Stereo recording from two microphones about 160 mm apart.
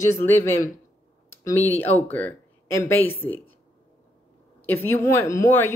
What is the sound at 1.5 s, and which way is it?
A woman's voice, 10° left (ahead or behind).